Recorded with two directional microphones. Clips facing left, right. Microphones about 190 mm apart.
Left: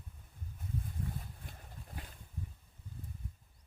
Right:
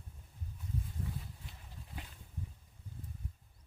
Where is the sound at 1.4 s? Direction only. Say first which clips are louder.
Left 2 dB; 50° left (ahead or behind).